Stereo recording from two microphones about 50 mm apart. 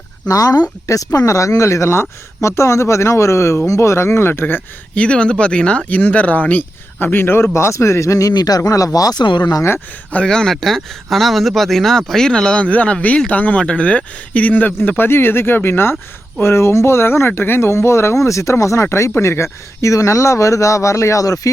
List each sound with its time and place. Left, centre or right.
0.3 s speech: left
4.9 s speech: left
10.2 s speech: centre
10.5 s speech: centre
12.6 s speech: left
14.8 s speech: left
16.4 s speech: left
18.6 s speech: left
19.1 s speech: left